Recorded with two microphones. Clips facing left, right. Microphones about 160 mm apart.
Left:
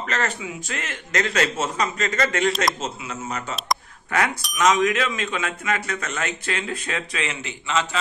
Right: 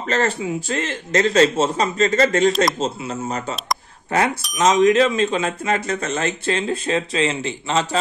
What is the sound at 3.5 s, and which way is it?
Speech, centre (ahead or behind).